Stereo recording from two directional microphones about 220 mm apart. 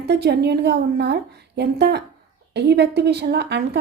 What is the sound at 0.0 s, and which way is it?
A woman's voice, 50° right (ahead or behind).